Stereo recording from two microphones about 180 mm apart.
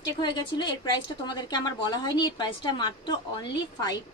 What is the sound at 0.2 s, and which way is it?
A woman's voice, 25° left (ahead or behind).